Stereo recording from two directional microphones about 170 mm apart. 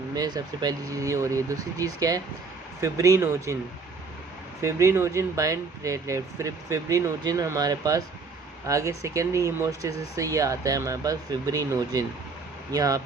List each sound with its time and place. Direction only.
0.1 s speech: 20° right (ahead or behind)
4.6 s speech: 15° right (ahead or behind)